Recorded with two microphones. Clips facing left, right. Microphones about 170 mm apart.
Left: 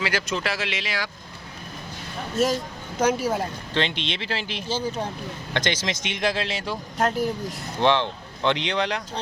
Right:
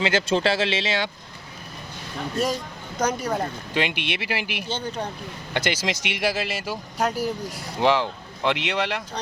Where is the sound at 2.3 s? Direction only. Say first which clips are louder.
Left 3 dB; centre (ahead or behind).